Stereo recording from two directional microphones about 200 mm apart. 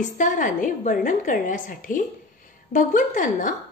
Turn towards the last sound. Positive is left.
turn(degrees=40)  # may be behind; listen again after turning